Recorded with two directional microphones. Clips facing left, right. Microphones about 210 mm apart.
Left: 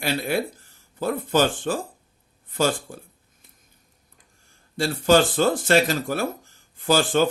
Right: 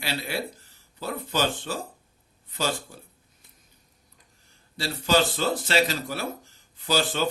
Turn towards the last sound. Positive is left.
turn(degrees=50)  # may be behind; listen again after turning